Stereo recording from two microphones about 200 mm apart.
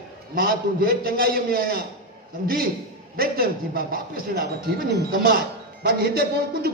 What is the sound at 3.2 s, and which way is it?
Speech, 50° right (ahead or behind).